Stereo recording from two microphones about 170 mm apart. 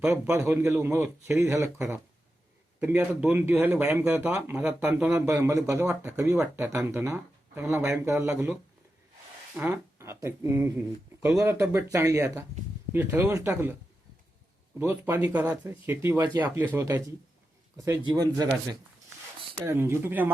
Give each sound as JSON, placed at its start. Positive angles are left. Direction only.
{"t": 0.0, "sound": "speech", "side_deg": -15}
{"t": 9.6, "sound": "speech", "side_deg": -10}
{"t": 14.8, "sound": "speech", "side_deg": -15}